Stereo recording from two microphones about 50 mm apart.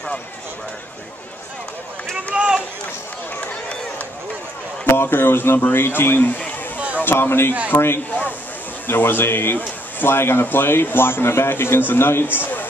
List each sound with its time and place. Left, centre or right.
2.3 s run: centre
4.8 s speech: left
8.1 s speech: left
8.8 s speech: left